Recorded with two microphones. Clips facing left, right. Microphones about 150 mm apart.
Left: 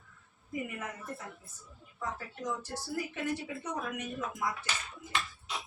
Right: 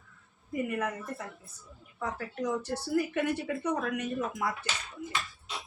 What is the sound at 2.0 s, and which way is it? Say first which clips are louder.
Speech: right 5 dB; 65° right (ahead or behind).